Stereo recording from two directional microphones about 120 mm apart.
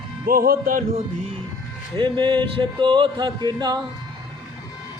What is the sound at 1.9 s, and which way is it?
Speech, 45° right (ahead or behind).